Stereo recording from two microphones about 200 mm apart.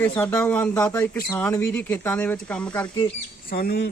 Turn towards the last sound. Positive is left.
turn(degrees=50)  # may be behind; listen again after turning